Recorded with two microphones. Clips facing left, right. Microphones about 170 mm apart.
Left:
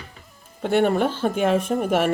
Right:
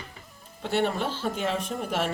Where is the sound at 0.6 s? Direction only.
55° left (ahead or behind).